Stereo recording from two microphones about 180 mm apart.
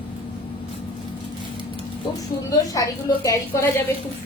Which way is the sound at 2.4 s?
20° left (ahead or behind).